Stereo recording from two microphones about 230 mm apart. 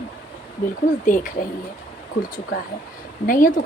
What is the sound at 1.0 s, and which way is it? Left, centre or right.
Speech, left.